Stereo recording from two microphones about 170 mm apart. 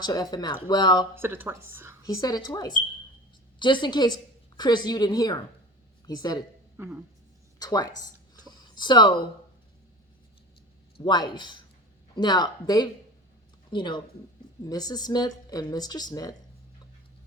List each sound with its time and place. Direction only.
0.0 s a woman's voice: 25° left (ahead or behind)
1.1 s speech: 15° right (ahead or behind)
2.0 s a woman's voice: 20° left (ahead or behind)
6.7 s a sound: 10° right (ahead or behind)
7.6 s a woman's voice: 25° left (ahead or behind)
8.4 s a sound: 25° left (ahead or behind)
10.9 s a woman's voice: 25° left (ahead or behind)